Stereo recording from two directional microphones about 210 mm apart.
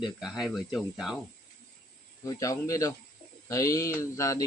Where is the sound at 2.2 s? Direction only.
15° left (ahead or behind).